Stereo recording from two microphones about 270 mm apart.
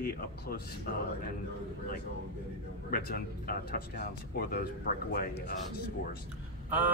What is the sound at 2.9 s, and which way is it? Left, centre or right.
Speech, left.